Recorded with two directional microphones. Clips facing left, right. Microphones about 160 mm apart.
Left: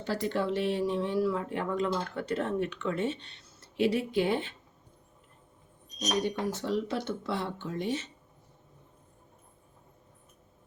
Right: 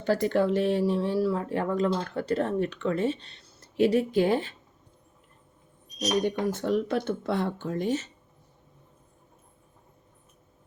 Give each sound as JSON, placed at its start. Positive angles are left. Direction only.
{"t": 0.0, "sound": "speech", "side_deg": -50}
{"t": 6.2, "sound": "speech", "side_deg": -50}